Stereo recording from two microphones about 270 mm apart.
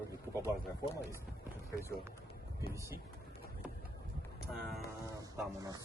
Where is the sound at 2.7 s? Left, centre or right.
Centre.